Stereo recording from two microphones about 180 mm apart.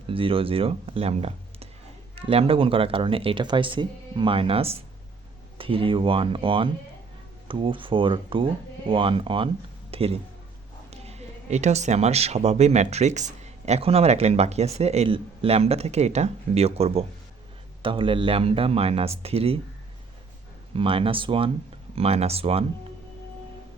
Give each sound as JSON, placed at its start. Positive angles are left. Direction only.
{"t": 0.1, "sound": "speech", "side_deg": -30}
{"t": 20.7, "sound": "speech", "side_deg": -30}